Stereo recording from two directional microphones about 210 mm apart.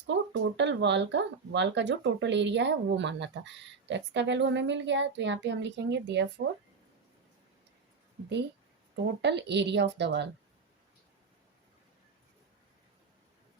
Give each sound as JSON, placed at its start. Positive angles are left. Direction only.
{"t": 0.1, "sound": "speech", "side_deg": -60}
{"t": 9.2, "sound": "speech", "side_deg": -55}